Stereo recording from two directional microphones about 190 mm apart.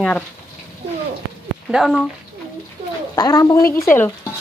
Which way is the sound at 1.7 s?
Centre (ahead or behind).